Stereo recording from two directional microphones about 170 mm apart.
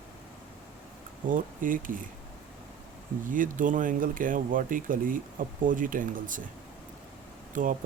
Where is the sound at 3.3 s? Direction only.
50° right (ahead or behind).